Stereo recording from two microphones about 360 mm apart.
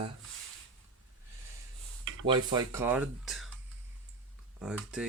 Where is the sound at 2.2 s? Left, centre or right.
Centre.